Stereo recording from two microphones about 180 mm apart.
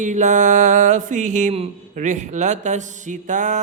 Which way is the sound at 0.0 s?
40° right (ahead or behind).